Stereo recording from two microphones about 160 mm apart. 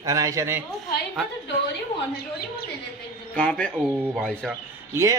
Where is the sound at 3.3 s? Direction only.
5° left (ahead or behind).